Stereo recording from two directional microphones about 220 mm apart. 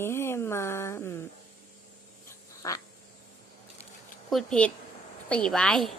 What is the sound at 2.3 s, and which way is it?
Duck, 15° left (ahead or behind).